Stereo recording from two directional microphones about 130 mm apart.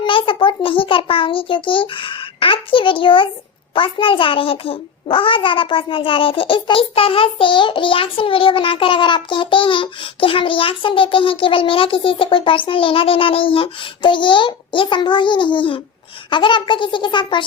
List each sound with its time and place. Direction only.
0.0 s a child's voice: 40° left (ahead or behind)